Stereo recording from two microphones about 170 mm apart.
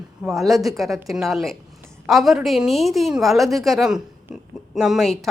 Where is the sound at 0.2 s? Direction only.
Centre (ahead or behind).